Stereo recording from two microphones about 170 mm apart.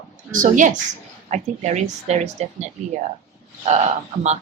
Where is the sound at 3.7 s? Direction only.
40° right (ahead or behind).